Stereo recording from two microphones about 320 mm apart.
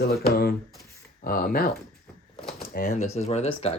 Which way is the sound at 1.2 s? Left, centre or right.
Left.